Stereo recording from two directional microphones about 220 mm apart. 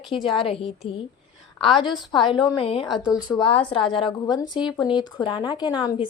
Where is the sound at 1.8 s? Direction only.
20° left (ahead or behind).